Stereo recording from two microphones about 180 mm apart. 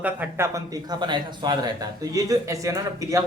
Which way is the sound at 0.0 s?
10° right (ahead or behind).